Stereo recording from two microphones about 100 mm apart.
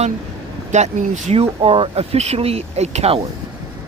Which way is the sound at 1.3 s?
75° right (ahead or behind).